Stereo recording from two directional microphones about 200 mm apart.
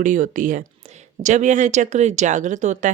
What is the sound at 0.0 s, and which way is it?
Speech, 40° right (ahead or behind).